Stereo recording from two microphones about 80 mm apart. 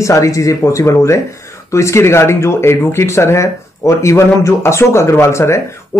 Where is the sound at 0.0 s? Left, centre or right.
Left.